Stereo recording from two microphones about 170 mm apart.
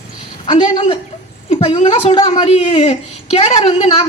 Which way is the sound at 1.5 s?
35° left (ahead or behind).